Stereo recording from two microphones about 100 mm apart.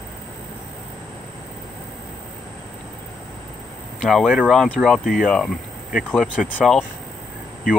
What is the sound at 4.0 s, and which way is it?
Speech, centre (ahead or behind).